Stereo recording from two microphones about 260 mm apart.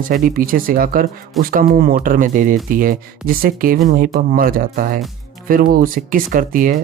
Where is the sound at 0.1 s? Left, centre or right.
Right.